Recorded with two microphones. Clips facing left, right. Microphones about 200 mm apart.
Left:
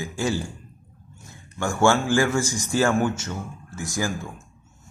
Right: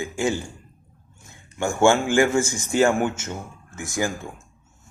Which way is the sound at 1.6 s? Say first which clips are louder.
Right 2 dB; 15° right (ahead or behind).